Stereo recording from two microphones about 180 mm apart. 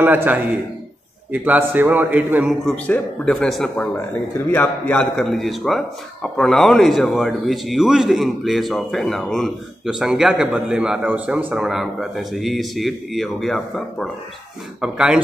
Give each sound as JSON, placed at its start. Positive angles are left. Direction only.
{"t": 0.0, "sound": "a man's voice", "side_deg": -10}
{"t": 2.7, "sound": "a man's voice", "side_deg": 5}